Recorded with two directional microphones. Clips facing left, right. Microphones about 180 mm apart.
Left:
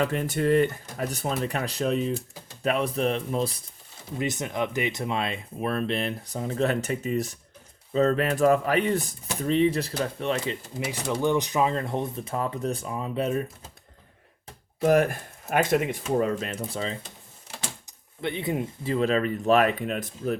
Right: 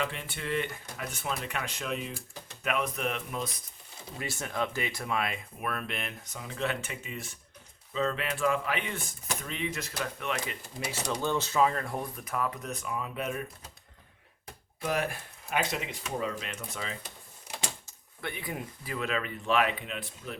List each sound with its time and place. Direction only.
0.0 s speech: 45° left (ahead or behind)
4.2 s speech: 20° left (ahead or behind)
14.8 s speech: 50° left (ahead or behind)